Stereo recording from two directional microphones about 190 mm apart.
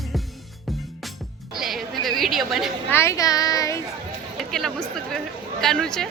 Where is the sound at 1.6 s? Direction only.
Centre (ahead or behind).